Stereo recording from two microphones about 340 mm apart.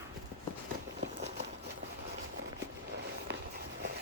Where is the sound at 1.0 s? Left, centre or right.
Right.